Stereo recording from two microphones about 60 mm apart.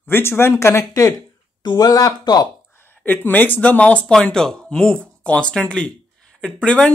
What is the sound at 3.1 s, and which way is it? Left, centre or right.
Speech, left.